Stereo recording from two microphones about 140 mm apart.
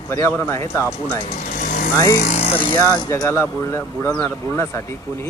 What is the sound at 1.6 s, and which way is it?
Vehicle, 80° left.